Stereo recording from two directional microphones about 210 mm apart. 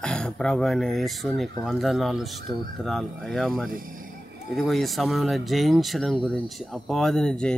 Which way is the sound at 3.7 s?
40° right (ahead or behind).